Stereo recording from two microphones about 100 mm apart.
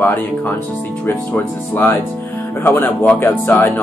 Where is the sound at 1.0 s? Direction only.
20° left (ahead or behind).